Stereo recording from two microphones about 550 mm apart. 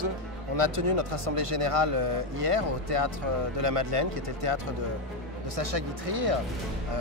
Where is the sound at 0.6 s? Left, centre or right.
Right.